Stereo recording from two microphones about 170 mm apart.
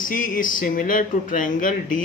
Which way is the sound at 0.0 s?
50° left (ahead or behind).